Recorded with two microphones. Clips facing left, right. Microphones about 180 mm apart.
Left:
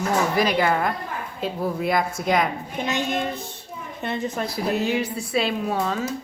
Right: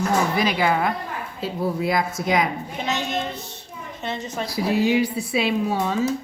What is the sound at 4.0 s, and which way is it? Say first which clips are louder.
Speech: left 2 dB; 55° left (ahead or behind).